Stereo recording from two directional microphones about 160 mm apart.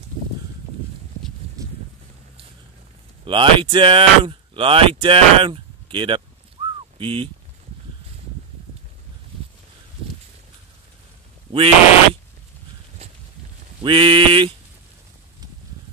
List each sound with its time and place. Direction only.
3.3 s speech: 30° right (ahead or behind)
11.5 s speech: 35° right (ahead or behind)
13.8 s speech: 30° right (ahead or behind)